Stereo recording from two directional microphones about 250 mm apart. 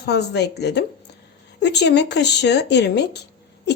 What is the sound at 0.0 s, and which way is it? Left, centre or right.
A woman's voice, left.